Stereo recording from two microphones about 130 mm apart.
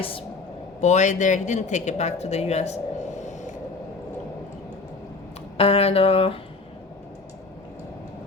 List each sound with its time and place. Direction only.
0.8 s speech: 65° left (ahead or behind)
5.5 s speech: 50° left (ahead or behind)